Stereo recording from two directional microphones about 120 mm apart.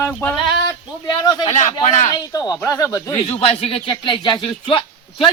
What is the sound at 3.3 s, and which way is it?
Speech, 55° left (ahead or behind).